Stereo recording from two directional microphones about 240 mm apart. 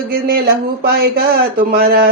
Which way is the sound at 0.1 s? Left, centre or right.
Right.